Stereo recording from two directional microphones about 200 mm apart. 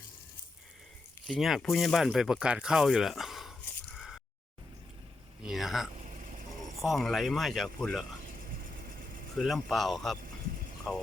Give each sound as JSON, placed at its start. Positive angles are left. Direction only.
{"t": 1.3, "sound": "speech", "side_deg": 0}
{"t": 5.4, "sound": "speech", "side_deg": 0}
{"t": 6.0, "sound": "vehicle", "side_deg": -35}
{"t": 6.8, "sound": "speech", "side_deg": 0}
{"t": 9.4, "sound": "speech", "side_deg": 0}